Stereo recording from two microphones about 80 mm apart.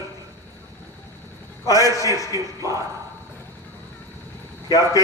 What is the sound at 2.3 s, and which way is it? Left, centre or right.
Speech, right.